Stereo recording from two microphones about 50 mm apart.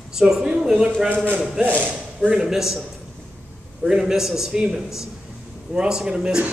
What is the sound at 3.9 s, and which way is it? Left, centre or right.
Speech, centre.